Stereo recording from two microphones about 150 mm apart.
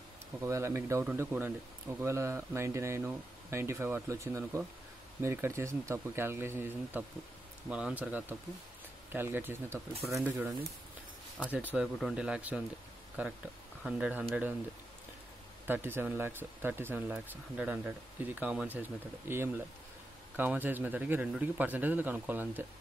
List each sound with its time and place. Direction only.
0.4 s speech: 20° right (ahead or behind)
15.6 s speech: 15° right (ahead or behind)